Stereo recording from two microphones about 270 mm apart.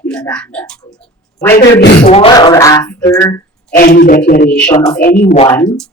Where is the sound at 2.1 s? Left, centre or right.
Centre.